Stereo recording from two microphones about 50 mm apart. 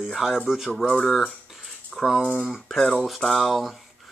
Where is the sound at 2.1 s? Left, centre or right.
Centre.